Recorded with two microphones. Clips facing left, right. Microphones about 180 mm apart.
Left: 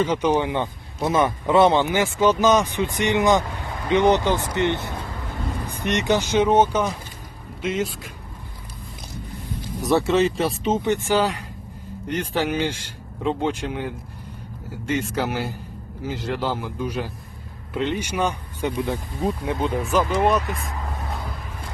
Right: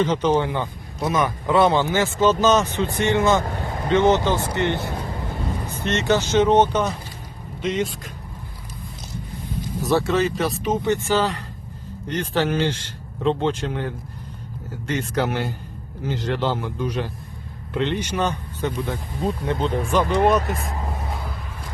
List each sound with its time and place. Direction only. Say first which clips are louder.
0.0 s speech: right 1 dB; 10° left (ahead or behind)
3.4 s a man's voice: right 4 dB; 50° right (ahead or behind)
3.8 s speech: even; 15° left (ahead or behind)
9.9 s speech: left 1 dB; 25° left (ahead or behind); by 20.4 s centre (ahead or behind)